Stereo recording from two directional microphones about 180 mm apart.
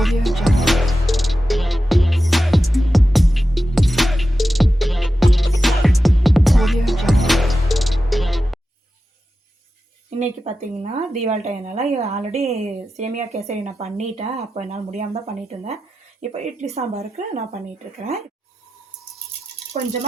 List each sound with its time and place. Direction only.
0.0 s music: centre (ahead or behind)
10.2 s a woman's voice: 40° right (ahead or behind)
19.7 s a woman's voice: 40° right (ahead or behind)